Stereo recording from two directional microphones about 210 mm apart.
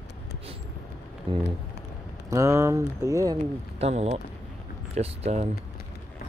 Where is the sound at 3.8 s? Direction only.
30° right (ahead or behind).